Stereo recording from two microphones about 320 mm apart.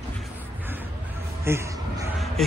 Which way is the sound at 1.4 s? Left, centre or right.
Centre.